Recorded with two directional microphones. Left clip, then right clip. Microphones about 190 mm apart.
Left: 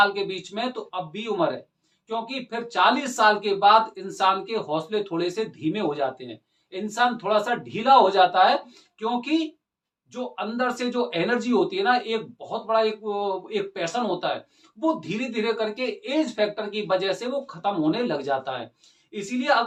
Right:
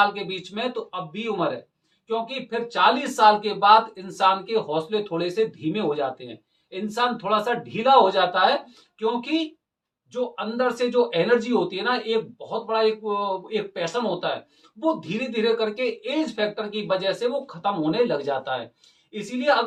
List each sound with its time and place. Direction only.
0.0 s speech: 15° left (ahead or behind)